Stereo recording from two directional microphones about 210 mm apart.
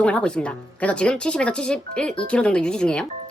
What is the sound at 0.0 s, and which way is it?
Speech, 5° left (ahead or behind).